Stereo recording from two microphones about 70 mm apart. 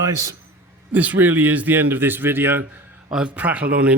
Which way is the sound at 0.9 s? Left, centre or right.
Right.